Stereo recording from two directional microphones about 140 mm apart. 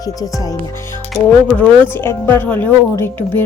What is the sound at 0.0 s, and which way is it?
Speech, 25° left (ahead or behind).